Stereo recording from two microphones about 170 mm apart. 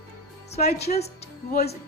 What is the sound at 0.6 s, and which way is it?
Speech, 40° left (ahead or behind).